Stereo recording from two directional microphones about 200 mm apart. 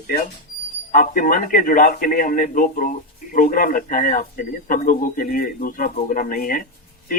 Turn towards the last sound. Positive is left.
turn(degrees=45)  # may be behind; listen again after turning